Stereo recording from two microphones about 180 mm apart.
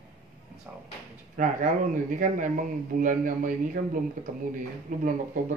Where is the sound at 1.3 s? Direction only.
45° right (ahead or behind).